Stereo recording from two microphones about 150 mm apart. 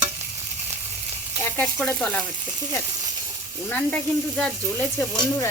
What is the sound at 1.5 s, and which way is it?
Sizzle, 10° left (ahead or behind).